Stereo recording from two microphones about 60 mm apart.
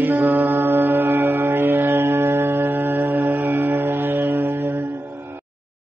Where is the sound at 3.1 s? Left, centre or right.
Right.